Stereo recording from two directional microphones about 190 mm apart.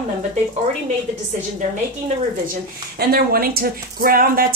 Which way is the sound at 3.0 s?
55° right (ahead or behind).